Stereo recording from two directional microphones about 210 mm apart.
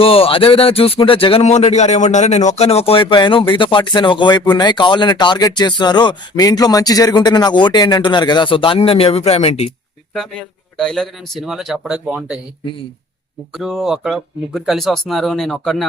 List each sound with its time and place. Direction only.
0.0 s speech: 25° left (ahead or behind)
10.8 s speech: centre (ahead or behind)
13.5 s speech: centre (ahead or behind)